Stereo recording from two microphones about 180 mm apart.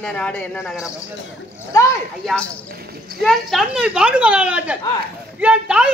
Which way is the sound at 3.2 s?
Centre (ahead or behind).